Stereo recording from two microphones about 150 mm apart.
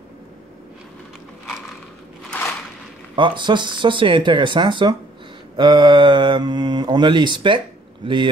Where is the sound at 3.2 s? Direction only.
30° right (ahead or behind).